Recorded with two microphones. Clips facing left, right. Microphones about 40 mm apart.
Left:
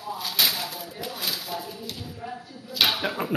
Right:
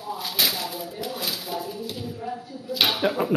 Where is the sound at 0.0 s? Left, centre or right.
Centre.